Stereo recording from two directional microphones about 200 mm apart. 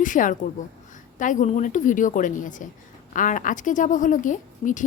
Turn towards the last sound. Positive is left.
turn(degrees=40)  # may be behind; listen again after turning